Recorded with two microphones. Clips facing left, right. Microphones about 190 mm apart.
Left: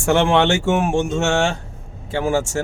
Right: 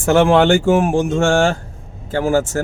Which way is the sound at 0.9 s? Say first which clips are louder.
Right 4 dB; 5° right (ahead or behind).